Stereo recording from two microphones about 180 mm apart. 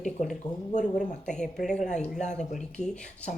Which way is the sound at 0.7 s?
40° left (ahead or behind).